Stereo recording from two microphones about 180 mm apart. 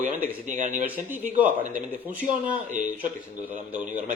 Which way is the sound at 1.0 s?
10° right (ahead or behind).